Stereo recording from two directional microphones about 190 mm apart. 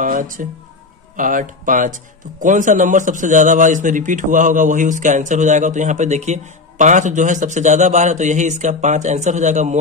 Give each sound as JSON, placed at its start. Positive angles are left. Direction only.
{"t": 0.0, "sound": "a man's voice", "side_deg": -45}